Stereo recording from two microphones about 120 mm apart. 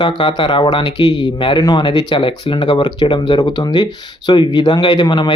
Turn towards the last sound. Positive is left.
turn(degrees=40)  # may be behind; listen again after turning